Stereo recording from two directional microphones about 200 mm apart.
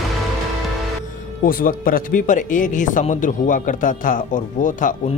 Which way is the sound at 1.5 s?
45° left (ahead or behind).